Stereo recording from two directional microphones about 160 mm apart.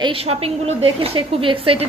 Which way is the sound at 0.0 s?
35° right (ahead or behind).